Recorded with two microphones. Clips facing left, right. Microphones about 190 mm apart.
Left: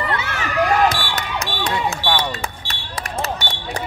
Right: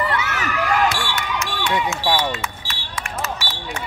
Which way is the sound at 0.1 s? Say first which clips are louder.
Even; 30° left (ahead or behind).